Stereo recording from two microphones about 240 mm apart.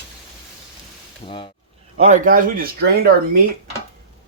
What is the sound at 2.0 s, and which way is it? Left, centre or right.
Speech, right.